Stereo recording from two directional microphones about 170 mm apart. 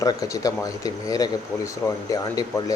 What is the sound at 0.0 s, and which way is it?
Speech, 20° left (ahead or behind).